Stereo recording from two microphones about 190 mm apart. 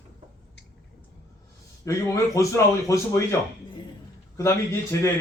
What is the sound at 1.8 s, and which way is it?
A man's voice, 15° left (ahead or behind).